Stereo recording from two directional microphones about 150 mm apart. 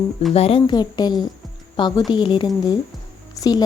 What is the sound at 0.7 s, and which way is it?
Speech, 30° left (ahead or behind).